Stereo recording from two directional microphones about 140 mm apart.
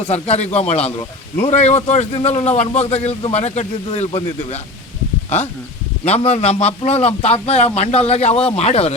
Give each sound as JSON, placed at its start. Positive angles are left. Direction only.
{"t": 0.0, "sound": "a man's voice", "side_deg": 50}
{"t": 6.1, "sound": "a man's voice", "side_deg": 45}